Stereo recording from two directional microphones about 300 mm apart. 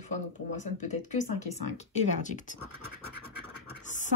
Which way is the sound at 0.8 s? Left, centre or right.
Left.